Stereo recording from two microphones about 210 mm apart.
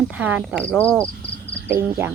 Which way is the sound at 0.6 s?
5° left (ahead or behind).